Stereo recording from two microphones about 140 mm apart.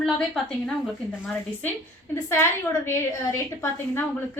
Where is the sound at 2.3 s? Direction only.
20° left (ahead or behind).